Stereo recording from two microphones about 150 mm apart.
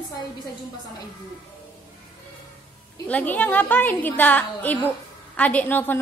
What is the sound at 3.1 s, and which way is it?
A woman's voice, 10° left (ahead or behind).